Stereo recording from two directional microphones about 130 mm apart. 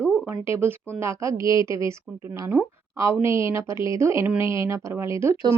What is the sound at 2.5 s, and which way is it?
Speech, 5° left (ahead or behind).